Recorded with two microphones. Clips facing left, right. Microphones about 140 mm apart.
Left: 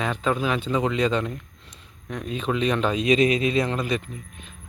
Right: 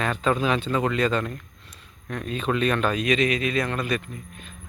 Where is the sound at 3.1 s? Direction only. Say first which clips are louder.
Left 3 dB; 30° left (ahead or behind).